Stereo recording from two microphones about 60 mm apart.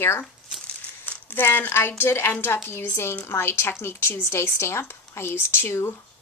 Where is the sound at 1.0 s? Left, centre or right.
Left.